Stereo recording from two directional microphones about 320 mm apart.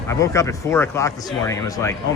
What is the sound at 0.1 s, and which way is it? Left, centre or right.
A man's voice, centre.